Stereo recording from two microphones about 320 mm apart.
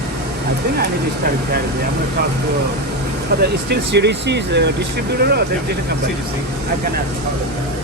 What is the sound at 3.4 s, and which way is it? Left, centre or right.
Speech, right.